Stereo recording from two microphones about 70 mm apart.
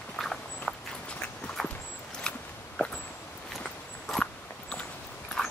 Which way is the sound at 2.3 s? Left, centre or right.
Centre.